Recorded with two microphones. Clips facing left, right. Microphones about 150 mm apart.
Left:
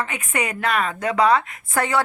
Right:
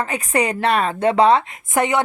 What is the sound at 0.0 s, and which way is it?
A woman's voice, 35° right (ahead or behind).